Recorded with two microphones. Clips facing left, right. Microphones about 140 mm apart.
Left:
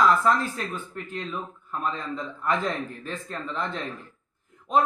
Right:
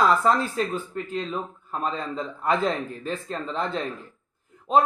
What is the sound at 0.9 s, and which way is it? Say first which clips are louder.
A man's voice: right 4 dB; 30° right (ahead or behind).